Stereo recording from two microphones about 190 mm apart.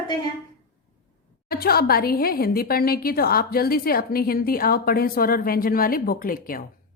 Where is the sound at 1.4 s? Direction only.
55° left (ahead or behind).